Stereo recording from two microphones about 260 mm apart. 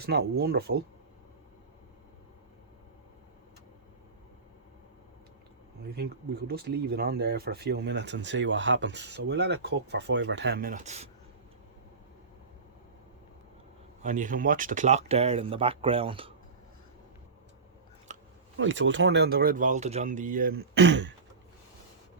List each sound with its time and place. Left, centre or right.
0.0 s speech: right
6.5 s speech: right
14.0 s speech: right
18.1 s a sound: right
18.5 s speech: right